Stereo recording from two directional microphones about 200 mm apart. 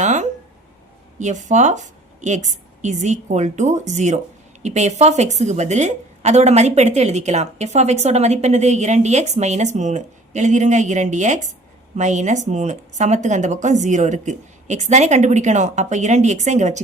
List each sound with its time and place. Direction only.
0.0 s a woman's voice: 35° right (ahead or behind)